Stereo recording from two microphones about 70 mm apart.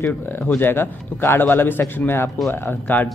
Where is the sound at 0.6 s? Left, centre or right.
Left.